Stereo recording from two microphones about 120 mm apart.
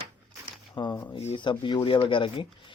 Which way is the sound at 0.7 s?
40° left (ahead or behind).